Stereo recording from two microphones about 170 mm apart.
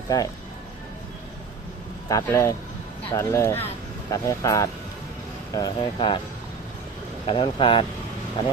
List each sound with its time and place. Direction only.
0.1 s speech: 20° left (ahead or behind)
2.0 s speech: 20° left (ahead or behind)
7.3 s speech: 30° left (ahead or behind)